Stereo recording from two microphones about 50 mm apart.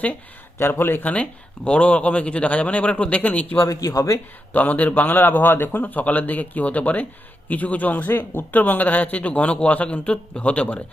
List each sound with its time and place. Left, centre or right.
0.6 s speech: left
1.0 s speech: left
3.7 s a man's voice: left
4.5 s a man's voice: left